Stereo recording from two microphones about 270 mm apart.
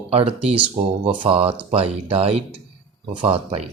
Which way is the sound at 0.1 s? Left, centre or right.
Right.